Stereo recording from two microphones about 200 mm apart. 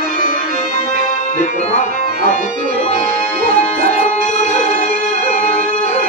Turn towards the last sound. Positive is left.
turn(degrees=35)  # may be behind; listen again after turning